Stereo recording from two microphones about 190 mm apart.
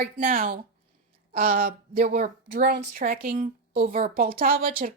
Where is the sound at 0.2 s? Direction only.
45° right (ahead or behind).